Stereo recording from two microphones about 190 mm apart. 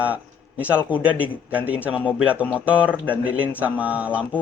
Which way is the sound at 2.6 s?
5° right (ahead or behind).